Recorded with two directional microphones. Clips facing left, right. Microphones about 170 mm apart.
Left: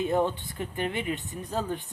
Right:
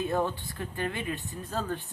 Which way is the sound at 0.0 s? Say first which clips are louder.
Left 3 dB; 20° left (ahead or behind).